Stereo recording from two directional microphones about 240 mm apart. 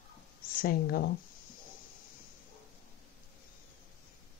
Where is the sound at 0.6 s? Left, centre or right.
Left.